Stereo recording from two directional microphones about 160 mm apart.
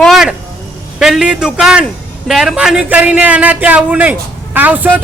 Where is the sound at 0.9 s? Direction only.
5° right (ahead or behind).